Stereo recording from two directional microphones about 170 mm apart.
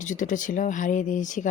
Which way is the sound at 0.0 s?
50° left (ahead or behind).